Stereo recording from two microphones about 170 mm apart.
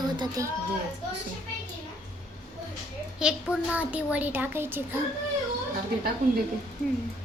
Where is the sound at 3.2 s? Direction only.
5° right (ahead or behind).